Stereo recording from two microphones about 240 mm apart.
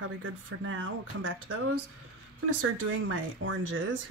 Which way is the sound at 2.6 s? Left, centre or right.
Right.